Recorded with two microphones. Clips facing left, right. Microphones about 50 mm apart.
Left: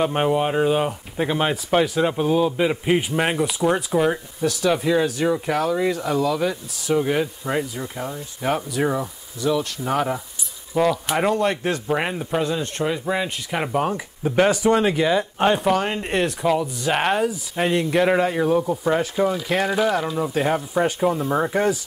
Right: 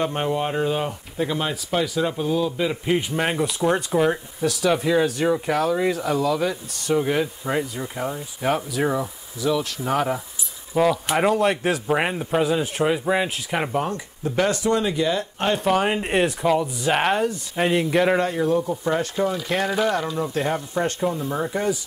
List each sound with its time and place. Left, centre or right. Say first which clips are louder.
0.0 s speech: left 3 dB; centre
1.2 s a man's voice: left 3 dB; left
3.3 s speech: left 1 dB; centre
13.7 s a man's voice: left 2 dB; centre
15.6 s speech: even; centre